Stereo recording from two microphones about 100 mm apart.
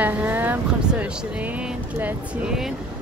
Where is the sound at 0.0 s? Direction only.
15° right (ahead or behind).